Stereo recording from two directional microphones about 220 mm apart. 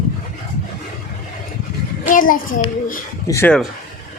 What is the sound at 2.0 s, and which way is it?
Speech, 35° left (ahead or behind).